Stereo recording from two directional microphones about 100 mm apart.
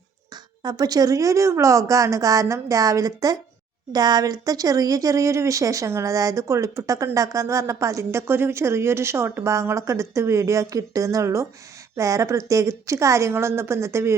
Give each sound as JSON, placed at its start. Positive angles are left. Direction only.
{"t": 0.6, "sound": "a woman's voice", "side_deg": -40}